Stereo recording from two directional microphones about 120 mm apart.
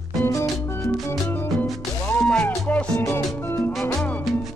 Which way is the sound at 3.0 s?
25° left (ahead or behind).